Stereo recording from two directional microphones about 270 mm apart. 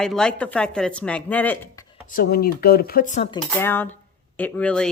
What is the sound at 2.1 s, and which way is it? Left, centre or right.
Speech, left.